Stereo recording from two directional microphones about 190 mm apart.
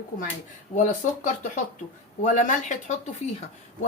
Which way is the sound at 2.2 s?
40° left (ahead or behind).